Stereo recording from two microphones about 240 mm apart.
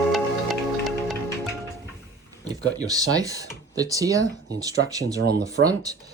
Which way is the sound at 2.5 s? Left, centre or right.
Centre.